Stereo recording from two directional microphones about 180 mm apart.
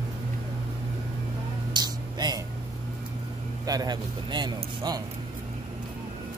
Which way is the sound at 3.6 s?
20° right (ahead or behind).